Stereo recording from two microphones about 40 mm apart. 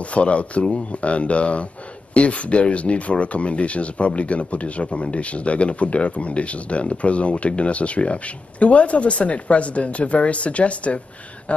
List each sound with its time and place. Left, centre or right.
0.0 s speech: left